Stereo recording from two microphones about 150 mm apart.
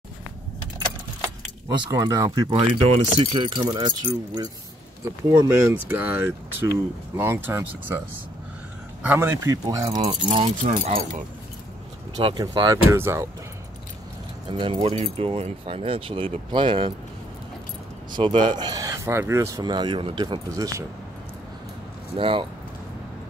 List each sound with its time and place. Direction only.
1.9 s speech: 25° right (ahead or behind)
2.5 s speech: 40° right (ahead or behind); by 8.0 s 15° right (ahead or behind)
9.0 s speech: 15° right (ahead or behind)
9.9 s speech: 35° right (ahead or behind)
10.6 s speech: 65° right (ahead or behind)
12.2 s speech: 35° right (ahead or behind); by 13.3 s 15° right (ahead or behind)
14.5 s speech: 35° right (ahead or behind)
18.1 s speech: 35° right (ahead or behind)
22.1 s speech: 35° right (ahead or behind)